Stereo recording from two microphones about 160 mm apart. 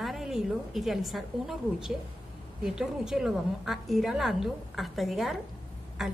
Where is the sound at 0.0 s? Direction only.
Centre (ahead or behind).